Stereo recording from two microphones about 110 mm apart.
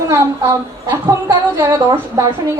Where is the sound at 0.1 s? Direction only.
25° right (ahead or behind).